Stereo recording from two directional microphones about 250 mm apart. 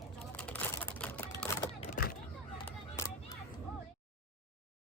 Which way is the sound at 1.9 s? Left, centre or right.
Left.